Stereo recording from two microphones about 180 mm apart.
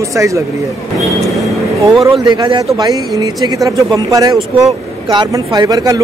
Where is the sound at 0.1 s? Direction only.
15° right (ahead or behind).